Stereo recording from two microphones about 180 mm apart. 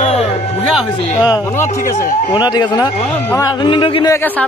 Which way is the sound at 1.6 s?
20° left (ahead or behind).